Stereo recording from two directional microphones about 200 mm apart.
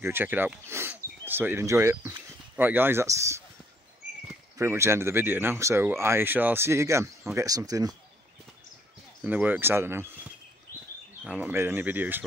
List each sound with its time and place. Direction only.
0.0 s speech: 10° right (ahead or behind)
4.6 s speech: 15° right (ahead or behind)
9.2 s speech: 10° right (ahead or behind)
11.2 s speech: 10° right (ahead or behind)